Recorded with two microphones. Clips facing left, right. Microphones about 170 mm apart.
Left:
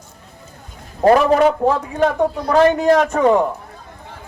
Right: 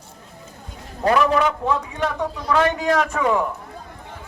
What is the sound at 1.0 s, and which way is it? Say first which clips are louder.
A man's voice: left 6 dB; 45° left (ahead or behind).